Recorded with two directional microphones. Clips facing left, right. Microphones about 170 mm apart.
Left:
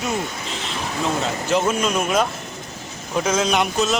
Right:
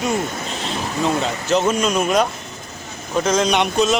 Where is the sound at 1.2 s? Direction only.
5° left (ahead or behind).